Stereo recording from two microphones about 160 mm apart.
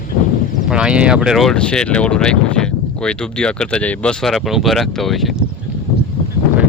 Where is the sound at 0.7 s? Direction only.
5° right (ahead or behind).